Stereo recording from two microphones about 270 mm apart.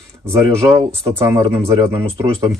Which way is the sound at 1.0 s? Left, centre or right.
Centre.